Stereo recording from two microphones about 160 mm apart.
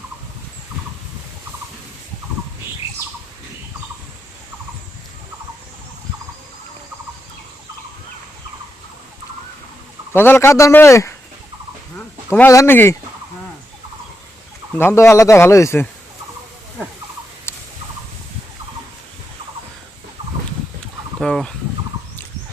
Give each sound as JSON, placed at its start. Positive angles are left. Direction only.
{"t": 10.1, "sound": "a man's voice", "side_deg": 15}
{"t": 14.8, "sound": "a man's voice", "side_deg": 15}
{"t": 17.5, "sound": "turkey", "side_deg": 15}
{"t": 21.2, "sound": "boat", "side_deg": 5}